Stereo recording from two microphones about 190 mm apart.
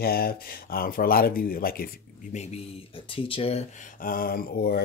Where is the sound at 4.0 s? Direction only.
50° left (ahead or behind).